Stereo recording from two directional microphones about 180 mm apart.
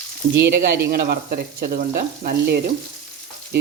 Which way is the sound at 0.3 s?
65° right (ahead or behind).